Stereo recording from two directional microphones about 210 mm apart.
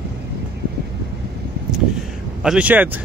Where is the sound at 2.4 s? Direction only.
5° right (ahead or behind).